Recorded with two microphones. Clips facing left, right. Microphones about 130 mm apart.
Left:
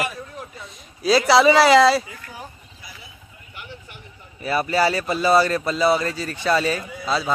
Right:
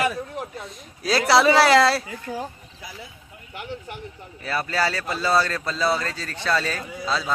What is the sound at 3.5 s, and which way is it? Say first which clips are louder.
Speech: right 6 dB; 90° right.